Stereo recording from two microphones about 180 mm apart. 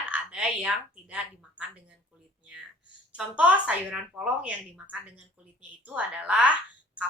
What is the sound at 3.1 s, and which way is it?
Speech, 5° right (ahead or behind).